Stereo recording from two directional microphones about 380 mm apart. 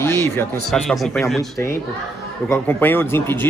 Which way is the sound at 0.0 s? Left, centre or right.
Centre.